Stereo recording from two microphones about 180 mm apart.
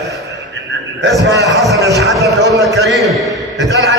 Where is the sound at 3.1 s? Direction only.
Centre (ahead or behind).